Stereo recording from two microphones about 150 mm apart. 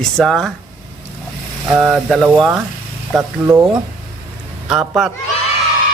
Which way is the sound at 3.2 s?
20° right (ahead or behind).